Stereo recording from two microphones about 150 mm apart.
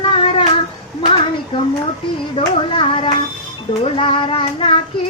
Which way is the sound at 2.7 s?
35° left (ahead or behind).